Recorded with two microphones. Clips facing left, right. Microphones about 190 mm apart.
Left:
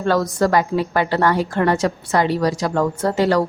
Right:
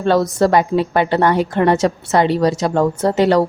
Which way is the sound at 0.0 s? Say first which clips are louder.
Right 3 dB; 25° right (ahead or behind).